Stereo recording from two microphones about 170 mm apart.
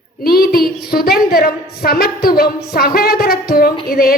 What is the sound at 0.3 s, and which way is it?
A woman's voice, 65° left (ahead or behind).